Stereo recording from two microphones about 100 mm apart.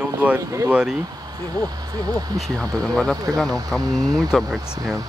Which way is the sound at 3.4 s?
35° right (ahead or behind).